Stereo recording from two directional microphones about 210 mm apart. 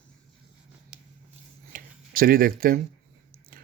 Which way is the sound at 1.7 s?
40° right (ahead or behind).